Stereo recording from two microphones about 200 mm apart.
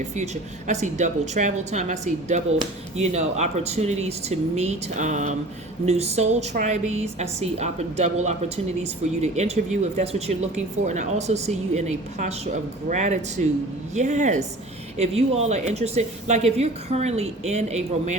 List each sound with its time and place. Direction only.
0.7 s a woman's voice: 35° right (ahead or behind)